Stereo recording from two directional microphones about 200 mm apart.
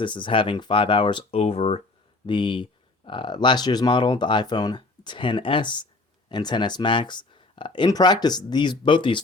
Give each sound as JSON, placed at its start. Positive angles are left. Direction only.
{"t": 0.0, "sound": "speech", "side_deg": 25}